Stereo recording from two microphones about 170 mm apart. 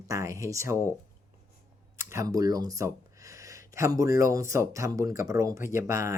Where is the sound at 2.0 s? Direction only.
20° right (ahead or behind).